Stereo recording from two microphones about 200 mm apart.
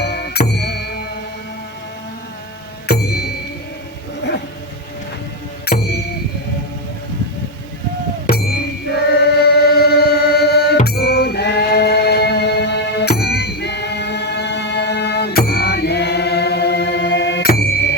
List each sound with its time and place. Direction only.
0.0 s music: 55° left (ahead or behind)
2.8 s music: 50° left (ahead or behind)
5.7 s music: 55° left (ahead or behind)
8.3 s chant: 50° left (ahead or behind)